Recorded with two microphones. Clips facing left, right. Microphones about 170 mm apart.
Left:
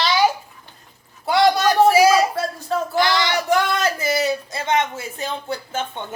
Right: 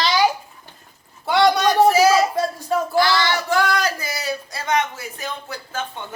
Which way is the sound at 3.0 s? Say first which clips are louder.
Even; 20° left (ahead or behind).